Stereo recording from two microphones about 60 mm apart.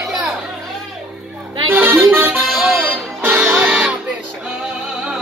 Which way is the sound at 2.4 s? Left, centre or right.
Centre.